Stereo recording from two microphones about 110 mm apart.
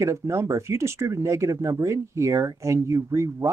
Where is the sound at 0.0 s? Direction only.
25° right (ahead or behind).